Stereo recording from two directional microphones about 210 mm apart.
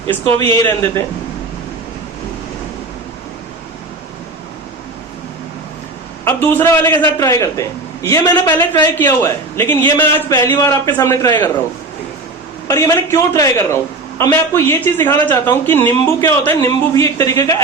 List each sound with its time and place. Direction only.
0.5 s speech: 10° left (ahead or behind)
6.2 s speech: 10° left (ahead or behind)
12.6 s speech: 15° left (ahead or behind)